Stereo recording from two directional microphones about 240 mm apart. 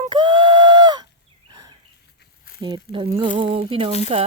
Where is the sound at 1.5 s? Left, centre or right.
Centre.